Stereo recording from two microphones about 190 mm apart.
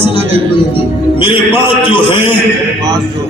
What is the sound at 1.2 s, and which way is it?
A man's voice, 25° left (ahead or behind).